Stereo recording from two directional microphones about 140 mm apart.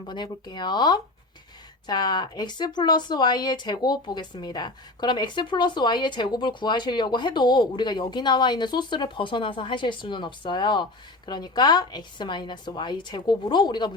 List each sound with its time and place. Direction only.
0.0 s speech: 35° left (ahead or behind)